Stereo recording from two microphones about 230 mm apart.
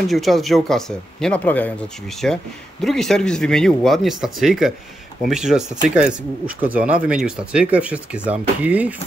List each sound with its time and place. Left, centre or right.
0.1 s speech: centre